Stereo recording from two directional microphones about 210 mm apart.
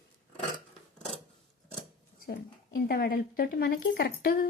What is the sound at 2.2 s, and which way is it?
A woman's voice, 45° left (ahead or behind).